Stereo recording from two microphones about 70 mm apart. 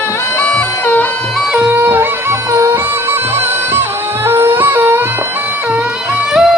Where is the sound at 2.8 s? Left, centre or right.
Right.